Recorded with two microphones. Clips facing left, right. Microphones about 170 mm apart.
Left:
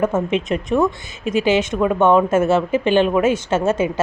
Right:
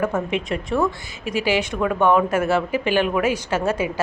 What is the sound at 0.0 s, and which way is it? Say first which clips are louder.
A woman's voice: left 4 dB; 25° left (ahead or behind).